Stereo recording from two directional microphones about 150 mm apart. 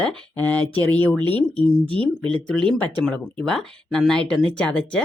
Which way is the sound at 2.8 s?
10° left (ahead or behind).